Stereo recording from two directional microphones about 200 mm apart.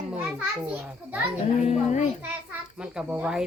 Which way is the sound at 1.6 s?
35° left (ahead or behind).